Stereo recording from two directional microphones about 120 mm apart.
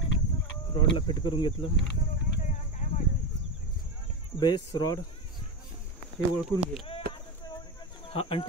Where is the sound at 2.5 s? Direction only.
80° left.